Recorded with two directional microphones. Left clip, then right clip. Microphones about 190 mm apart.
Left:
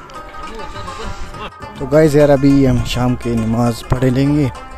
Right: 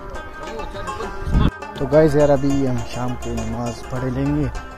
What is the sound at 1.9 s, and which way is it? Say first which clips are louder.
Speech: left 4 dB; 35° left (ahead or behind).